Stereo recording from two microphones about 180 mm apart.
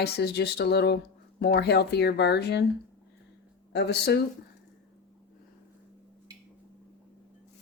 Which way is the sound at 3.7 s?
70° left (ahead or behind).